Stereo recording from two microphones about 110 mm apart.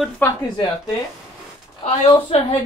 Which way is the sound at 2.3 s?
70° left (ahead or behind).